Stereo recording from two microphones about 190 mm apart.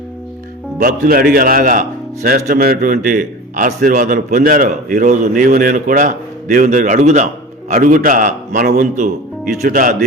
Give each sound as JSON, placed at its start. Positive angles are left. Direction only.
{"t": 0.8, "sound": "a man's voice", "side_deg": -45}